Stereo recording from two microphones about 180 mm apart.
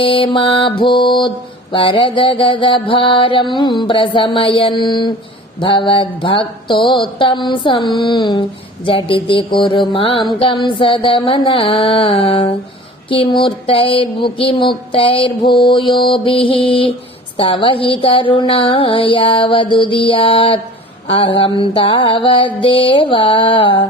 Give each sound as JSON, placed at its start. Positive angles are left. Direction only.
{"t": 0.0, "sound": "mantra", "side_deg": 30}